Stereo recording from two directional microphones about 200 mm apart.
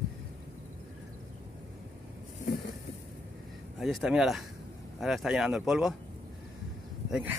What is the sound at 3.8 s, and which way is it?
Speech, centre (ahead or behind).